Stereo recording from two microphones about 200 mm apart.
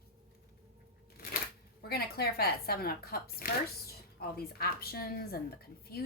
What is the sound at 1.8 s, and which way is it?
Speech, 50° left (ahead or behind).